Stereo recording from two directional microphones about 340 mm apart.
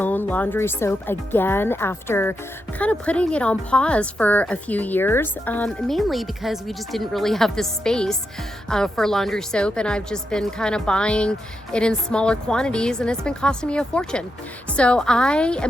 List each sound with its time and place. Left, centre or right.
0.0 s a woman's voice: centre